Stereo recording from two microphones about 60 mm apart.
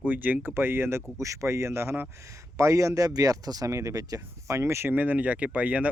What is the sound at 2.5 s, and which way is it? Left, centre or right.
Speech, right.